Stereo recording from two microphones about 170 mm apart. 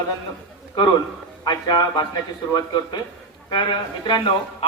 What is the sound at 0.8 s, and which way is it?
Speech, 25° left (ahead or behind).